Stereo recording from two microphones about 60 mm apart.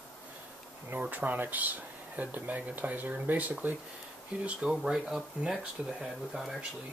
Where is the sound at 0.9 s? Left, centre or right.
Right.